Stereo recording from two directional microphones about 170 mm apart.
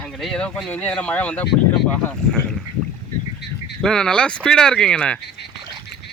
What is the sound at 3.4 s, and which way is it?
Goose, 90° left.